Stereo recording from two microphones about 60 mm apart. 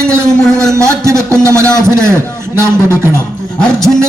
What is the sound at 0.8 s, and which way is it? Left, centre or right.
A man's voice, right.